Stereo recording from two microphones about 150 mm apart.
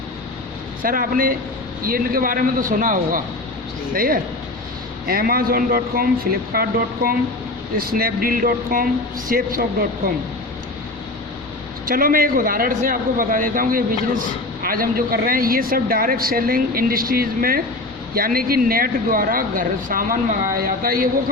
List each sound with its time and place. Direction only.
0.8 s a man's voice: 70° right (ahead or behind)
11.9 s speech: 70° right (ahead or behind)